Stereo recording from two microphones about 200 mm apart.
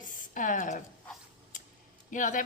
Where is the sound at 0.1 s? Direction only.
40° left (ahead or behind).